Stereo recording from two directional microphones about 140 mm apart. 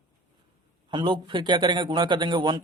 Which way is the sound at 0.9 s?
35° right (ahead or behind).